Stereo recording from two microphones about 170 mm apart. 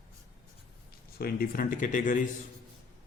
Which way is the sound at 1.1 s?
60° left (ahead or behind).